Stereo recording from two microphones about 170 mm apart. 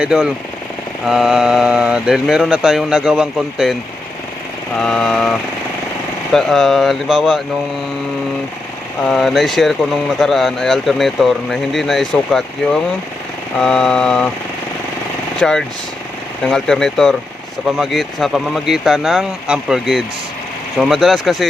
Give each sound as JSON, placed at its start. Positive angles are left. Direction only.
{"t": 0.0, "sound": "speech", "side_deg": -5}
{"t": 4.8, "sound": "speech", "side_deg": 5}
{"t": 9.0, "sound": "speech", "side_deg": 0}
{"t": 15.4, "sound": "speech", "side_deg": 0}